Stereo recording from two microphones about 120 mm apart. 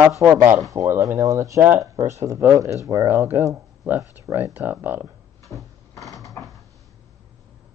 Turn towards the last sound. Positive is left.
turn(degrees=25)  # may be behind; listen again after turning